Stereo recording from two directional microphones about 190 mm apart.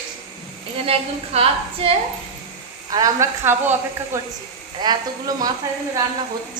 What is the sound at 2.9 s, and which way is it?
A woman's voice, 20° right (ahead or behind).